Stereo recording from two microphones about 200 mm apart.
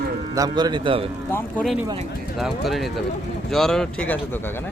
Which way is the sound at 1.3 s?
5° left (ahead or behind).